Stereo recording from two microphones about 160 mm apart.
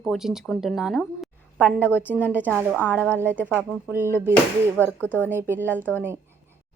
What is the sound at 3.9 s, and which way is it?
Speech, 15° right (ahead or behind).